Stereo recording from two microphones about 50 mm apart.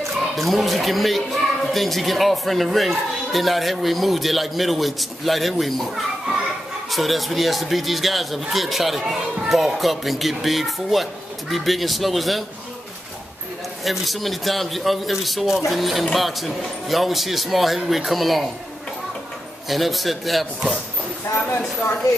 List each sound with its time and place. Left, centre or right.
0.4 s speech: centre
6.9 s speech: centre
13.8 s speech: centre
19.7 s speech: centre